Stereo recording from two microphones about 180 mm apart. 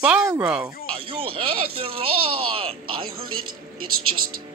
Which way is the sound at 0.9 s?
30° right (ahead or behind).